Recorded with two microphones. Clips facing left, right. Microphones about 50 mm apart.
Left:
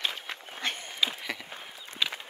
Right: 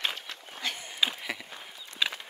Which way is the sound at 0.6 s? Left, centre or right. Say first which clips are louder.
Left 2 dB; left.